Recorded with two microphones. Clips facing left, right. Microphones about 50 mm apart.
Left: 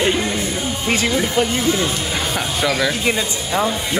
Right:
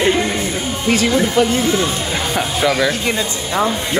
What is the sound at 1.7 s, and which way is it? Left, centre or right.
Speech, centre.